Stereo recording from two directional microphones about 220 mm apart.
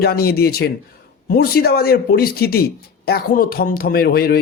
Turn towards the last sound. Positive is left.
turn(degrees=45)  # may be behind; listen again after turning